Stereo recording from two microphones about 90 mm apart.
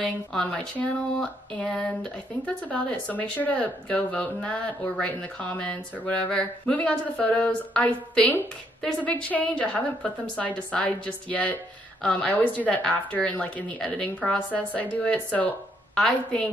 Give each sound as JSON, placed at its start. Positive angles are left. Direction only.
{"t": 0.0, "sound": "speech", "side_deg": 10}